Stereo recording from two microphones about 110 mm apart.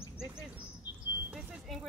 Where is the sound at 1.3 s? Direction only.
Centre (ahead or behind).